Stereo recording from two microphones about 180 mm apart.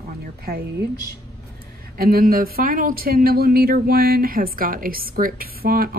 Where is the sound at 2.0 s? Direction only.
55° right (ahead or behind).